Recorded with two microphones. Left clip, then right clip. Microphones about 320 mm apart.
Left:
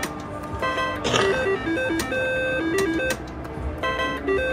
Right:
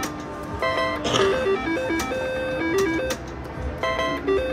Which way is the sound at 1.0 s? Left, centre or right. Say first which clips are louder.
Left 1 dB; left.